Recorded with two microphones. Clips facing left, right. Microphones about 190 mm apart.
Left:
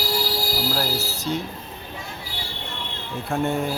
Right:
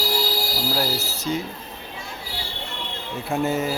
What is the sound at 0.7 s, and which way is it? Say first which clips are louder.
Music: right 1 dB; centre (ahead or behind).